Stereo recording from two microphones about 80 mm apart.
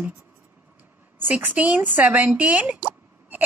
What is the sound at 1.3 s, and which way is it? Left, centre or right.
Speech, centre.